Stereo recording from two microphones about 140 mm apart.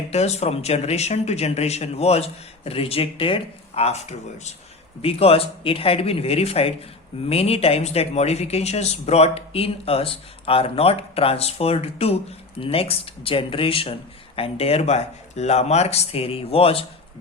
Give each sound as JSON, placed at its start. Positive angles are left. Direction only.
{"t": 0.1, "sound": "speech", "side_deg": 50}